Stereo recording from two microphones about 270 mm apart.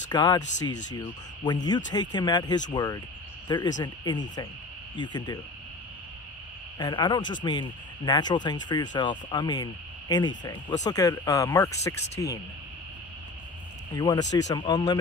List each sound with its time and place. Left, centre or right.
0.1 s speech: centre
6.8 s speech: centre
13.9 s speech: centre